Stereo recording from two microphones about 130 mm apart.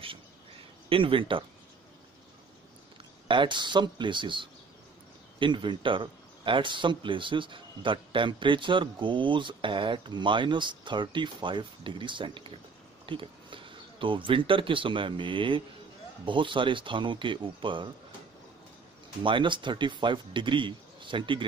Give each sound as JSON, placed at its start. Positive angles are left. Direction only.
{"t": 0.8, "sound": "speech", "side_deg": -45}
{"t": 3.3, "sound": "speech", "side_deg": -40}
{"t": 19.2, "sound": "speech", "side_deg": -40}